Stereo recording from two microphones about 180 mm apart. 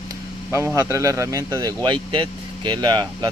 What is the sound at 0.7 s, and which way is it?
Speech, 15° right (ahead or behind).